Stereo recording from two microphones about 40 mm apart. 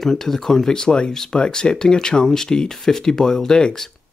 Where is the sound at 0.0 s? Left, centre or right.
Centre.